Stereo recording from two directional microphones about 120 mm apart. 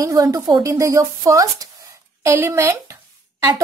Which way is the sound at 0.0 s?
30° right (ahead or behind).